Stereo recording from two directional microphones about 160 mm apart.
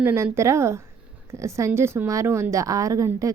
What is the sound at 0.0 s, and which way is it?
A woman's voice, 15° right (ahead or behind).